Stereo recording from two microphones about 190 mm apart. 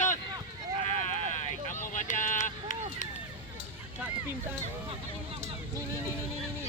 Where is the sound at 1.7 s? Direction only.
40° left (ahead or behind).